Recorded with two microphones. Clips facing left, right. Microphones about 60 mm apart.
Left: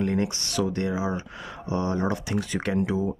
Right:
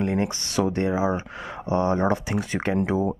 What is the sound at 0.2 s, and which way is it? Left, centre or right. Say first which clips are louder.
Speech: right 2 dB; right.